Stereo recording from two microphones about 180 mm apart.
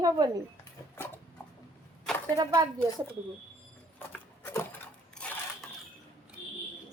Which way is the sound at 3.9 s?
15° left (ahead or behind).